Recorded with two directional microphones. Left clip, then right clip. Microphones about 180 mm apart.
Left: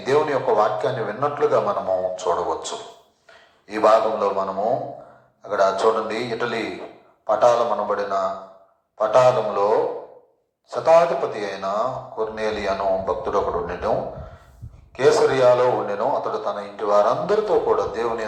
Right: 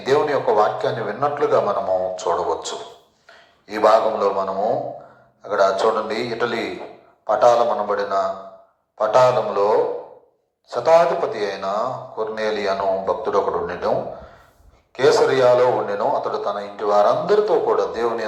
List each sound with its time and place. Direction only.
0.0 s a man's voice: 15° right (ahead or behind)
14.9 s speech: 15° right (ahead or behind)